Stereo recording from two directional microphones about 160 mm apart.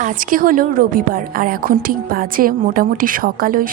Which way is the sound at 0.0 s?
60° right (ahead or behind).